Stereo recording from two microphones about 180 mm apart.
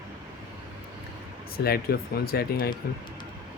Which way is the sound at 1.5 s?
60° left (ahead or behind).